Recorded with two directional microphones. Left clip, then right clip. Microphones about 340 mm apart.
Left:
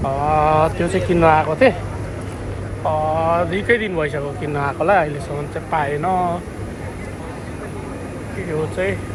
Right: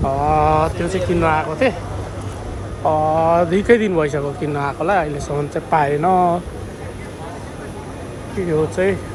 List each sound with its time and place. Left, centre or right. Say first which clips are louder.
0.0 s a sound: right 1 dB; centre
2.8 s speech: right 3 dB; centre
8.8 s speech: right 3 dB; centre